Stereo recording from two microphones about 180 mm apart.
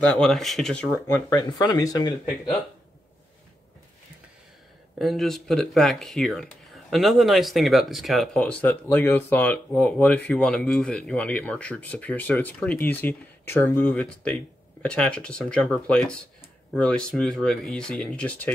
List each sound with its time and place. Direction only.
0.0 s speech: 5° left (ahead or behind)
1.0 s speech: 20° left (ahead or behind)
4.9 s speech: centre (ahead or behind)